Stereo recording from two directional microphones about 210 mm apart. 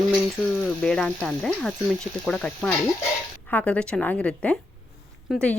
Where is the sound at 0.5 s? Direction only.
5° left (ahead or behind).